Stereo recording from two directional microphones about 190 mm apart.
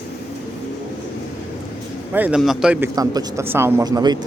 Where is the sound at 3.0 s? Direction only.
15° right (ahead or behind).